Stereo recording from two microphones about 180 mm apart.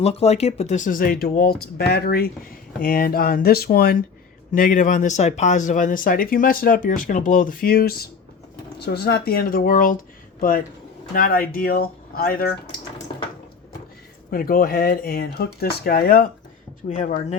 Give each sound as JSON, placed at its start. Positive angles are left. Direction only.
{"t": 0.0, "sound": "speech", "side_deg": 35}
{"t": 11.1, "sound": "speech", "side_deg": 55}
{"t": 14.3, "sound": "speech", "side_deg": 55}